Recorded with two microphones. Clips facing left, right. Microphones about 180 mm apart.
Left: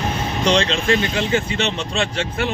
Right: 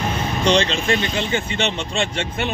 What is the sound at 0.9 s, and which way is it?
Speech, 30° right (ahead or behind).